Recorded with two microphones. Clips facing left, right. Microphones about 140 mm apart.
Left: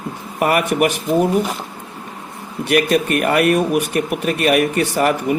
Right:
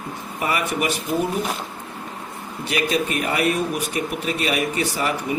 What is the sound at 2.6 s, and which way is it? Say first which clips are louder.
Speech: left 7 dB; 60° left (ahead or behind).